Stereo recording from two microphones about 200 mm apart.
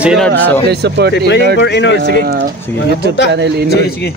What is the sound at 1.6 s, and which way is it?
Speech, 60° left (ahead or behind).